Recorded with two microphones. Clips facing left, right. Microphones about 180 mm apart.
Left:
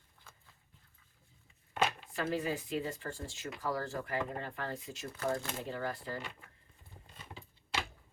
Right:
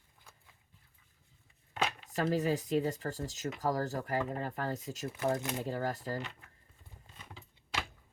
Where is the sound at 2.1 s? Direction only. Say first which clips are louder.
Right 4 dB; 40° right (ahead or behind).